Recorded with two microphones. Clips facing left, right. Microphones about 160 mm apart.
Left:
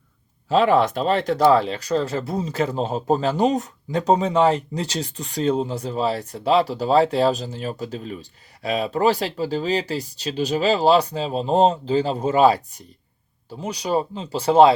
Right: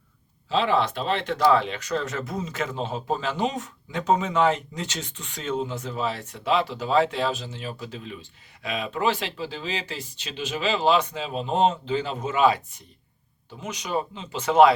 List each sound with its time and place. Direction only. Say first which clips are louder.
0.4 s a man's voice: left 6 dB; 45° left (ahead or behind)